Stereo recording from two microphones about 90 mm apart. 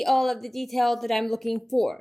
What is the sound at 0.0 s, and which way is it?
A woman's voice, centre (ahead or behind).